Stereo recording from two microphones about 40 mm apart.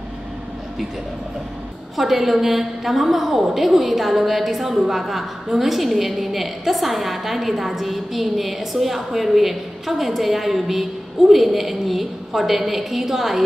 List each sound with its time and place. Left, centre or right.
2.0 s a woman's voice: centre